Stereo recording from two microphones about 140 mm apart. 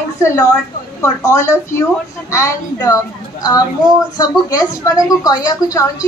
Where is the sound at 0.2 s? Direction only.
20° left (ahead or behind).